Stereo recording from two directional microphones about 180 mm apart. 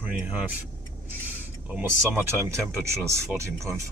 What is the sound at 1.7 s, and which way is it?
Speech, 10° right (ahead or behind).